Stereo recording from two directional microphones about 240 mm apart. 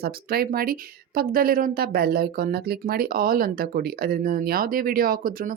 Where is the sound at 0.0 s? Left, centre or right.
Right.